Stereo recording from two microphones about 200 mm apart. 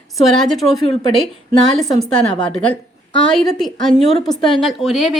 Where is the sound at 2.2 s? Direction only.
25° left (ahead or behind).